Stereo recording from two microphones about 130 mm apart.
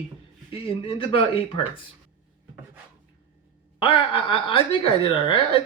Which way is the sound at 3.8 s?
40° left (ahead or behind).